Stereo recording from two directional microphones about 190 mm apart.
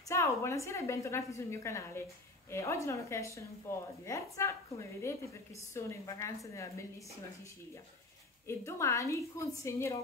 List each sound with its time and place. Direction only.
0.1 s a woman's voice: 15° left (ahead or behind)
8.5 s a woman's voice: 15° left (ahead or behind)